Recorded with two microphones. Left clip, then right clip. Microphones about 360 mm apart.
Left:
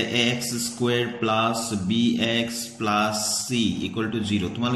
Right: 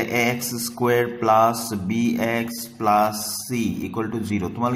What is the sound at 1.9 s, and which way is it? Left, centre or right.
Mantra, right.